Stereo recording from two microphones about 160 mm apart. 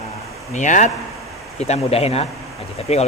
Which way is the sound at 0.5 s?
50° left (ahead or behind).